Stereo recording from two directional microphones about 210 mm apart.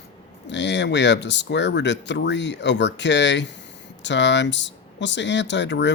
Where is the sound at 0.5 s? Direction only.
55° left (ahead or behind).